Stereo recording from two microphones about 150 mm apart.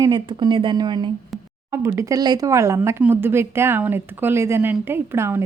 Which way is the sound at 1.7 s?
20° right (ahead or behind).